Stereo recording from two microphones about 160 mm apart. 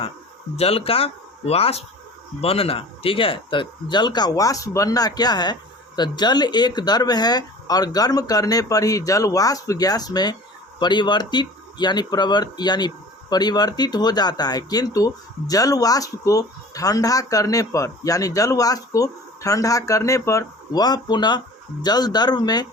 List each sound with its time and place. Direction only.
0.6 s speech: 40° left (ahead or behind)